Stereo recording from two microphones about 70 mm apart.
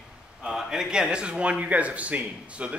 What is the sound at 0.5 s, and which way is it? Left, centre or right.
Speech, centre.